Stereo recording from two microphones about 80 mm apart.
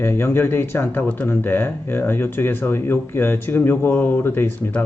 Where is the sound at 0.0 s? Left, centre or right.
Left.